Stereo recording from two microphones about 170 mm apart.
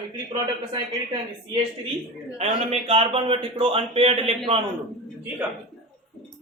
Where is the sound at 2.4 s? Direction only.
35° right (ahead or behind).